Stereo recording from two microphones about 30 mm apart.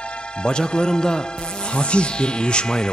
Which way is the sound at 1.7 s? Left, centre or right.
Left.